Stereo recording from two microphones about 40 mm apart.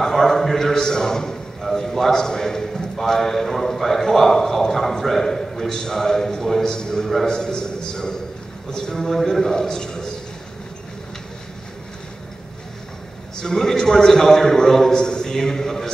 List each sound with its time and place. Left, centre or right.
0.0 s a man's voice: centre
13.4 s a man's voice: centre